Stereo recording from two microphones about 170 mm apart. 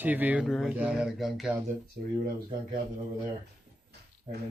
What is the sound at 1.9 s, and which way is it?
Speech, 60° right (ahead or behind).